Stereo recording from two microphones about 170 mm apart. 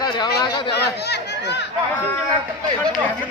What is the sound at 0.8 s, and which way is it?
Speech, 75° left (ahead or behind).